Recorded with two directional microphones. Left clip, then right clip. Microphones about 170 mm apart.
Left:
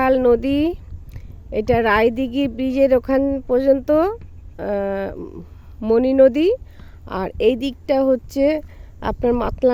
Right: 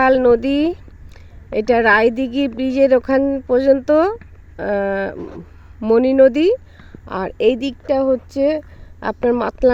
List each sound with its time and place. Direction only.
0.0 s a woman's voice: 10° left (ahead or behind)
7.9 s speech: 30° left (ahead or behind); by 9.7 s 15° left (ahead or behind)